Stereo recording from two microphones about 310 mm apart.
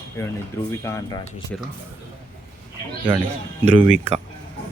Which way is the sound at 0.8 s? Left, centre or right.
Centre.